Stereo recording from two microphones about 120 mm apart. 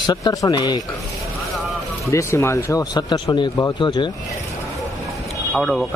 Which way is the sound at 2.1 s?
25° left (ahead or behind).